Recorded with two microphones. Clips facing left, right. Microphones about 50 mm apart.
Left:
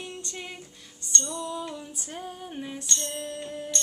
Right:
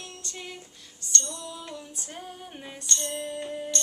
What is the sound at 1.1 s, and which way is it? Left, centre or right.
Female singing, centre.